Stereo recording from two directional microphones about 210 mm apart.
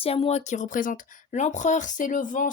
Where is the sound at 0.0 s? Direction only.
30° left (ahead or behind).